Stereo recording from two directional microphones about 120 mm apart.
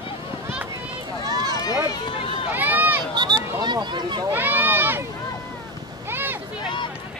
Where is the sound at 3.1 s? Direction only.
35° right (ahead or behind).